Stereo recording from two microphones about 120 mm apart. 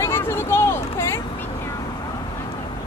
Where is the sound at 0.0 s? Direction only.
20° left (ahead or behind).